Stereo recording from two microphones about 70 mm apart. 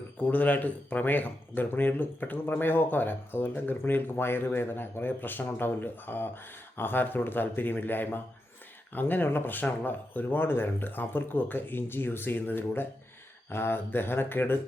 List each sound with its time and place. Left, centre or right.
0.2 s speech: left